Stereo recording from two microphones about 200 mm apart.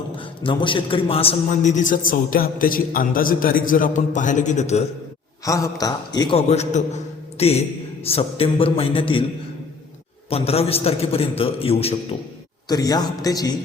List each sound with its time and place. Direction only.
0.4 s a man's voice: 25° left (ahead or behind)
5.5 s a man's voice: 15° left (ahead or behind)
10.2 s a man's voice: 30° left (ahead or behind)
12.6 s a man's voice: 20° left (ahead or behind)